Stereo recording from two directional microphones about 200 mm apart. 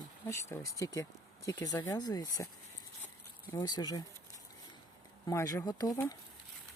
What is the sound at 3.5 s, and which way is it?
Speech, 20° left (ahead or behind).